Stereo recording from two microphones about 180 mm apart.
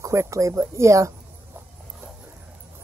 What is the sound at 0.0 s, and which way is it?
Speech, 15° right (ahead or behind).